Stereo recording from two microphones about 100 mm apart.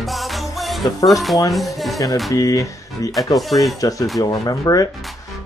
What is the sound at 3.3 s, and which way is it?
Music, centre (ahead or behind).